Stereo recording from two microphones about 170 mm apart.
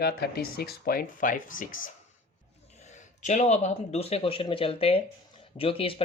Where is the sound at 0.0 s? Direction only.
65° left (ahead or behind).